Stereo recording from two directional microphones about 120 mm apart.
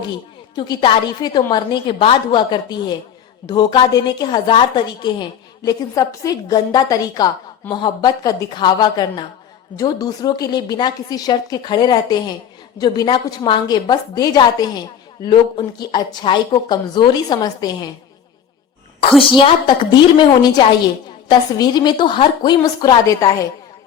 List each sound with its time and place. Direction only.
0.5 s a woman's voice: 40° left (ahead or behind)
19.3 s a woman's voice: 40° left (ahead or behind)